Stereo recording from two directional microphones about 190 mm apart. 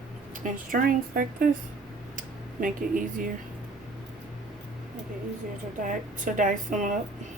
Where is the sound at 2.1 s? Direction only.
45° right (ahead or behind).